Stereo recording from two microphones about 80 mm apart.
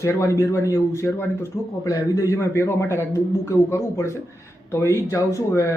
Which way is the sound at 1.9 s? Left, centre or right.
Left.